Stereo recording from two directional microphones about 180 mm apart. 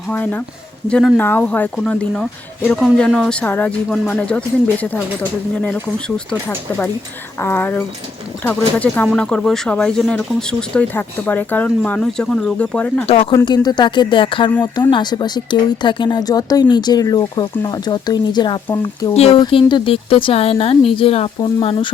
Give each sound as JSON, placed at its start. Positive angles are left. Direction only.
{"t": 0.1, "sound": "speech", "side_deg": 10}
{"t": 7.4, "sound": "speech", "side_deg": 10}
{"t": 13.3, "sound": "speech", "side_deg": 25}